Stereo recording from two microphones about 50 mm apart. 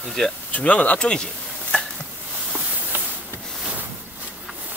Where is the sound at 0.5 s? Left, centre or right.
Left.